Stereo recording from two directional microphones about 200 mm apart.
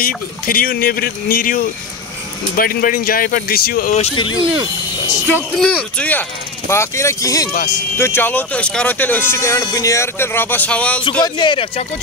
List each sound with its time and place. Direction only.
0.0 s speech: 45° left (ahead or behind)
3.9 s speech: 30° left (ahead or behind)
5.6 s speech: 5° left (ahead or behind)
11.2 s speech: 20° left (ahead or behind)